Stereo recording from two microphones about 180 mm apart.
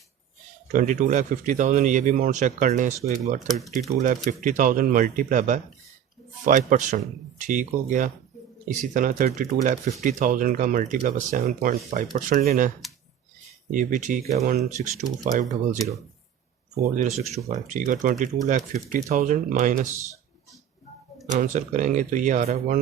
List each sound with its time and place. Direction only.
0.7 s speech: 45° right (ahead or behind)
3.5 s speech: centre (ahead or behind)
4.0 s speech: 45° right (ahead or behind)
16.8 s speech: 45° right (ahead or behind)
21.3 s speech: 45° right (ahead or behind)